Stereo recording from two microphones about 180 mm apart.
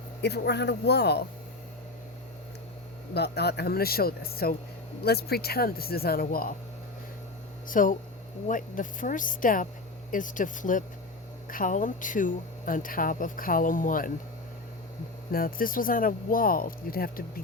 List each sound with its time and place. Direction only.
0.2 s speech: 65° left (ahead or behind)
3.2 s speech: 65° left (ahead or behind)
7.7 s speech: 50° left (ahead or behind)
15.3 s speech: 55° left (ahead or behind)